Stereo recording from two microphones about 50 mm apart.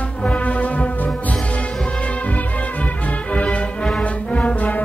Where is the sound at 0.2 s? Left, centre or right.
Left.